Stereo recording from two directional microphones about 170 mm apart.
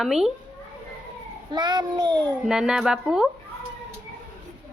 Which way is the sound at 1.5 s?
25° right (ahead or behind).